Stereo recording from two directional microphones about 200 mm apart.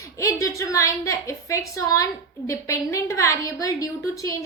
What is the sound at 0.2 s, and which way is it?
A woman's voice, 15° left (ahead or behind).